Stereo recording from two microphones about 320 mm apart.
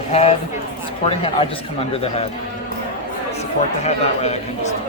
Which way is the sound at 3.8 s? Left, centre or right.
Centre.